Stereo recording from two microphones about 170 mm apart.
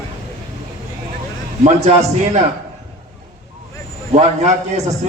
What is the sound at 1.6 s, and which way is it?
Speech, 40° right (ahead or behind).